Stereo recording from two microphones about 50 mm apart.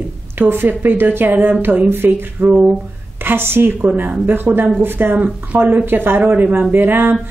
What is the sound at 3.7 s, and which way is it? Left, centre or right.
Speech, right.